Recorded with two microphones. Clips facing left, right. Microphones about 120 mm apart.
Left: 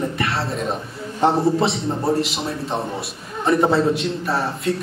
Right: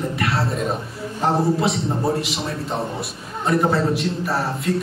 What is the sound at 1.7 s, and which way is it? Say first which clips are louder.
A man's voice: even; centre (ahead or behind).